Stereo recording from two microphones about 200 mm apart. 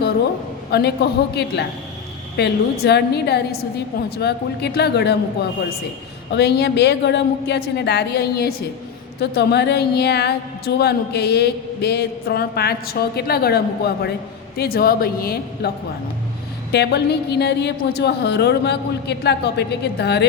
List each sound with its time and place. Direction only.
0.7 s a woman's voice: 55° left (ahead or behind)
2.3 s a woman's voice: 55° left (ahead or behind)
16.7 s a woman's voice: 55° left (ahead or behind)